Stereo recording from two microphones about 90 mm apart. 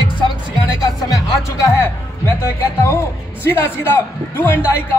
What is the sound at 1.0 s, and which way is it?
Music, 40° left (ahead or behind).